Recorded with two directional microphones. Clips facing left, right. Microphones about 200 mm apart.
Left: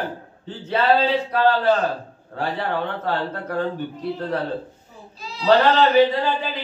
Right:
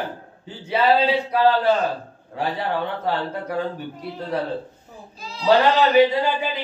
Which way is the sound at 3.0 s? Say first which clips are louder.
Even; 10° right (ahead or behind).